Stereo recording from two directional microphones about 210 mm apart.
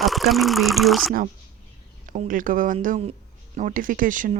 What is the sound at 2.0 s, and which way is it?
A woman's voice, 40° right (ahead or behind).